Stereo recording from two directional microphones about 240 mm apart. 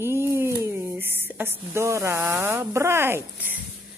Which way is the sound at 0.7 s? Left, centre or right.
Centre.